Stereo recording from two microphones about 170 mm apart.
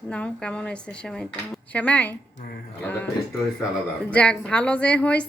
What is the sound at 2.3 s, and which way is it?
Speech, 60° left (ahead or behind).